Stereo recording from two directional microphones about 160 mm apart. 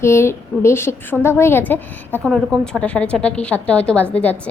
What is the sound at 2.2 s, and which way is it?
A woman's voice, centre (ahead or behind).